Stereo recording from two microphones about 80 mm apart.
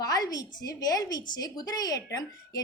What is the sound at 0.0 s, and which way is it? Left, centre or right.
A woman's voice, left.